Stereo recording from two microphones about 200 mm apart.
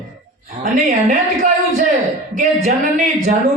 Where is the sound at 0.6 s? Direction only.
40° right (ahead or behind).